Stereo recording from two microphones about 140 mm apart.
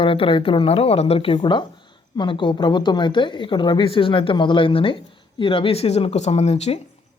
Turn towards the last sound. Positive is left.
turn(degrees=50)  # may be behind; listen again after turning